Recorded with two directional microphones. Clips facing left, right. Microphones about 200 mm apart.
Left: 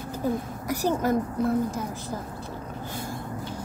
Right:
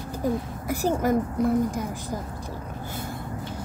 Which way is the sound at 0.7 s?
10° right (ahead or behind).